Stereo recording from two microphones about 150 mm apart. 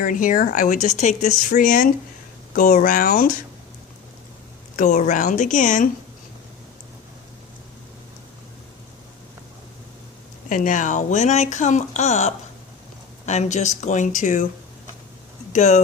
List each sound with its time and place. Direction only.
0.0 s speech: 60° left (ahead or behind)
4.8 s speech: 55° left (ahead or behind)
10.5 s speech: 60° left (ahead or behind)
15.5 s speech: 50° left (ahead or behind)